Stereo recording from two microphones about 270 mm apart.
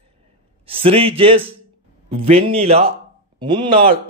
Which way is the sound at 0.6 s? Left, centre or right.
Centre.